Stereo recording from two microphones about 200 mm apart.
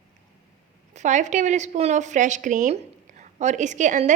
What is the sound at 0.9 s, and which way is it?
A woman's voice, 35° right (ahead or behind).